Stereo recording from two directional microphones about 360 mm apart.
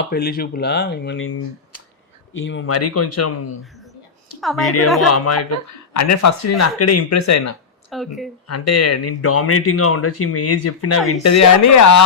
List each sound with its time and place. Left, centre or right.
0.1 s speech: left
4.4 s a woman's voice: centre
5.0 s speech: left
7.9 s speech: centre
8.4 s speech: left